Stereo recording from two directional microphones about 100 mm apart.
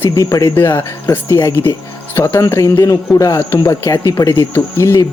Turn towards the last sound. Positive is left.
turn(degrees=30)  # may be behind; listen again after turning